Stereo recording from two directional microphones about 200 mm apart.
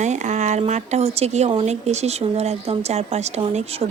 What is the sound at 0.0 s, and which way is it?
Speech, 35° right (ahead or behind).